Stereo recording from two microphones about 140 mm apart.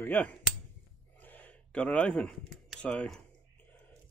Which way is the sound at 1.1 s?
10° left (ahead or behind).